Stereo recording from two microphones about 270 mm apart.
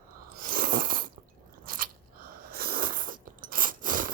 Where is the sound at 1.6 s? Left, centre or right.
Right.